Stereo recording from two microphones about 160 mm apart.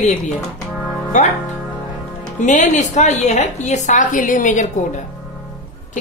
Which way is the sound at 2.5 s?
50° left (ahead or behind).